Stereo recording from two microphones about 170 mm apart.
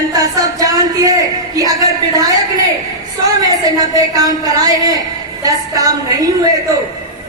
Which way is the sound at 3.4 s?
25° right (ahead or behind).